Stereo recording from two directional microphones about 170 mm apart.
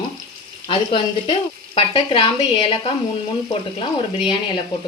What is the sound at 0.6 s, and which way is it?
A woman's voice, 35° left (ahead or behind).